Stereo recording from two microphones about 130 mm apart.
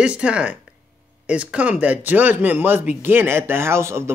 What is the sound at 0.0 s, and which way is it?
Speech, 10° right (ahead or behind).